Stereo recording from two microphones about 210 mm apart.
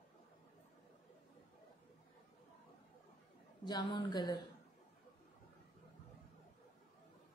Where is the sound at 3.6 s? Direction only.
20° left (ahead or behind).